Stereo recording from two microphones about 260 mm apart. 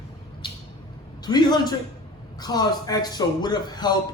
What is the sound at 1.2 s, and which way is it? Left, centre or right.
A man's voice, centre.